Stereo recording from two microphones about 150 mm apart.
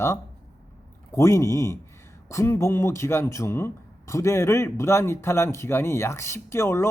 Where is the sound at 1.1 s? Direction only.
20° left (ahead or behind).